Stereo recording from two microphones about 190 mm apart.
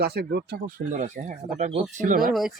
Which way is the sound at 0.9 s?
40° right (ahead or behind).